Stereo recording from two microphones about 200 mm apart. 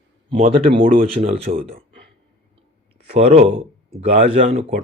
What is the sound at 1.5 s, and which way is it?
Speech, 45° right (ahead or behind).